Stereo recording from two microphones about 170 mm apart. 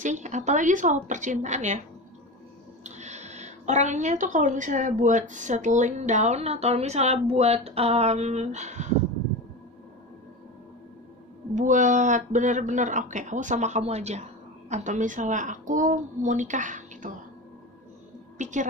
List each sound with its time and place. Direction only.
0.0 s a woman's voice: 45° right (ahead or behind)
2.8 s a woman's voice: 40° right (ahead or behind)
11.5 s a woman's voice: 45° right (ahead or behind)
18.4 s a woman's voice: 45° right (ahead or behind)